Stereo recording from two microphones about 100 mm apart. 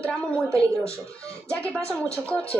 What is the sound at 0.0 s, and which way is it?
Speech, 10° left (ahead or behind).